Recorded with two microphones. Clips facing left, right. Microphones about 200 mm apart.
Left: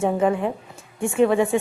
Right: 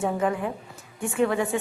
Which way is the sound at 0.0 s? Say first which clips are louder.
Left 5 dB; 25° left (ahead or behind).